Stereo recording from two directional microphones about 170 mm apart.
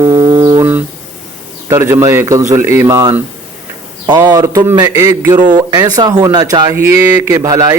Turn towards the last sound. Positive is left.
turn(degrees=-20)  # may be behind; listen again after turning